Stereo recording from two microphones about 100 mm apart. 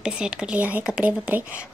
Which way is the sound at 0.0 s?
10° right (ahead or behind).